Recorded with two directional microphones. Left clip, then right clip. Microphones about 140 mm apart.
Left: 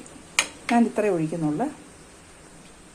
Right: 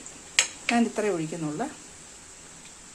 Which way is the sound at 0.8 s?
Centre (ahead or behind).